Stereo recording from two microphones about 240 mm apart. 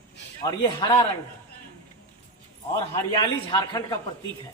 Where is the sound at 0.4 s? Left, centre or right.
Centre.